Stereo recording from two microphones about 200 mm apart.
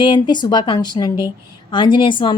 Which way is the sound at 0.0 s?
20° left (ahead or behind).